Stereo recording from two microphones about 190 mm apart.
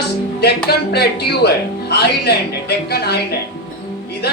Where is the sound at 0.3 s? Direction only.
60° left (ahead or behind).